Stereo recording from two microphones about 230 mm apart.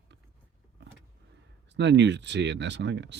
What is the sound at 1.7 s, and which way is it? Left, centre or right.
Speech, right.